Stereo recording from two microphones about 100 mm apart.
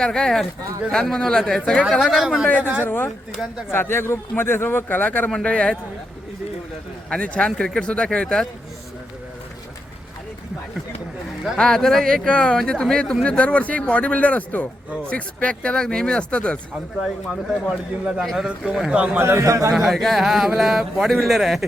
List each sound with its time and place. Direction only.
0.0 s speech: 5° left (ahead or behind)
2.8 s a man's voice: 20° left (ahead or behind)
7.1 s speech: 10° left (ahead or behind)
11.5 s speech: 5° left (ahead or behind)
17.0 s a man's voice: centre (ahead or behind)
19.2 s a man's voice: 25° right (ahead or behind)
19.7 s speech: centre (ahead or behind)